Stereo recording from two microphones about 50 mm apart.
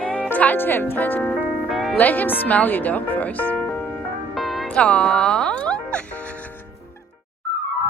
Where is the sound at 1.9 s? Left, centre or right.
Left.